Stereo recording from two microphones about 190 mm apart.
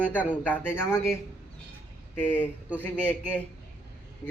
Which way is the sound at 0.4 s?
10° left (ahead or behind).